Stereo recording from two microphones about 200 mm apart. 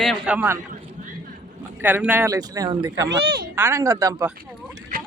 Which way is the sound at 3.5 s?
10° right (ahead or behind).